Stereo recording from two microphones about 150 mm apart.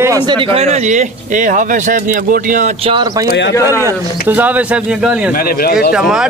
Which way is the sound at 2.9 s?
30° right (ahead or behind).